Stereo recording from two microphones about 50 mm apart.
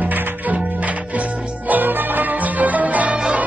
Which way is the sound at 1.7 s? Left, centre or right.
Right.